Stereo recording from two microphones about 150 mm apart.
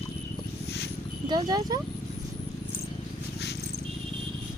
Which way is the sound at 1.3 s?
25° right (ahead or behind).